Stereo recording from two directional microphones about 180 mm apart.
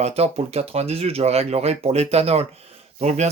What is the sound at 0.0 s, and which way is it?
Speech, 35° right (ahead or behind).